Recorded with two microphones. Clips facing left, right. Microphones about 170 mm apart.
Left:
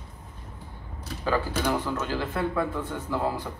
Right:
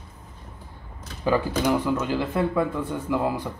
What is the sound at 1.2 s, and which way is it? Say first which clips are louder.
Speech: right 4 dB; 15° right (ahead or behind).